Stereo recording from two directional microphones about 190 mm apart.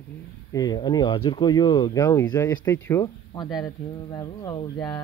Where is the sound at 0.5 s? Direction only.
20° left (ahead or behind).